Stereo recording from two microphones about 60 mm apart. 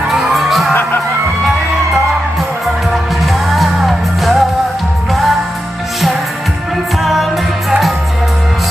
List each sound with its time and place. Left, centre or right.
0.1 s music: centre
0.7 s music: left
3.5 s music: centre
7.0 s music: centre